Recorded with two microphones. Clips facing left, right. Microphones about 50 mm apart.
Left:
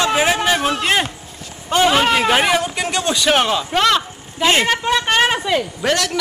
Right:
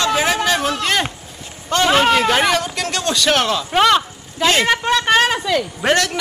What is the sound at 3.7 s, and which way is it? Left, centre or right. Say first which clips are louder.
Speech: right 3 dB; centre.